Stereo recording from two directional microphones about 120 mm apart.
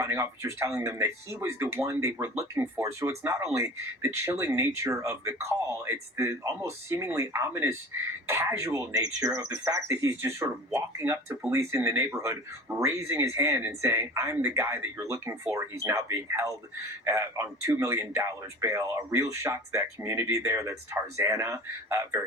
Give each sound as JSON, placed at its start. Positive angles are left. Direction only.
{"t": 0.0, "sound": "speech", "side_deg": -25}